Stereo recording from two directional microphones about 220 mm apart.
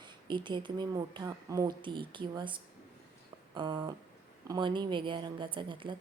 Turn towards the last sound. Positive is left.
turn(degrees=-20)  # may be behind; listen again after turning